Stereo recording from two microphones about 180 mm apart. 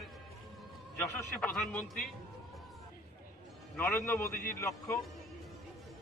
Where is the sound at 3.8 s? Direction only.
15° left (ahead or behind).